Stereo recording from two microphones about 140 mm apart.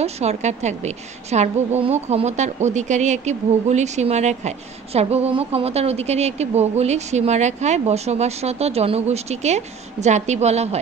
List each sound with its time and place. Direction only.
0.0 s a woman's voice: 50° right (ahead or behind)